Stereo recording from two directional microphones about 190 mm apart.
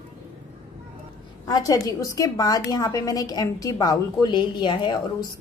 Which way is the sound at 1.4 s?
20° left (ahead or behind).